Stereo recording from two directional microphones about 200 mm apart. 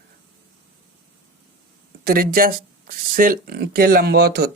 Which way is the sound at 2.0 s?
45° right (ahead or behind).